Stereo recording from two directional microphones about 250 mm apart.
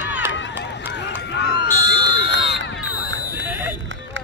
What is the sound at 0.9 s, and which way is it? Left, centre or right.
Run, left.